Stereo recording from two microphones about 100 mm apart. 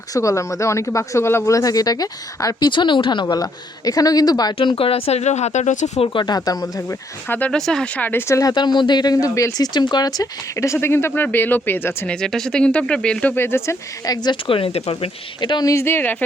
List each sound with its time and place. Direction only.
0.1 s speech: 30° left (ahead or behind)
2.6 s speech: 50° left (ahead or behind)
4.5 s speech: 65° left (ahead or behind); by 6.0 s 90° left
6.2 s speech: 40° left (ahead or behind)
7.3 s speech: 15° left (ahead or behind)
8.0 s speech: 20° left (ahead or behind)
8.4 s speech: 45° left (ahead or behind); by 12.0 s 20° left (ahead or behind)
12.0 s speech: 5° left (ahead or behind)
13.3 s speech: 25° left (ahead or behind)
14.0 s speech: 45° left (ahead or behind); by 15.1 s 80° left
15.4 s speech: 45° left (ahead or behind)
15.7 s speech: 25° left (ahead or behind)